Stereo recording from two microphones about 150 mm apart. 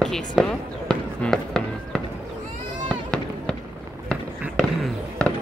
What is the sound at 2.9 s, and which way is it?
Fireworks, 5° left (ahead or behind).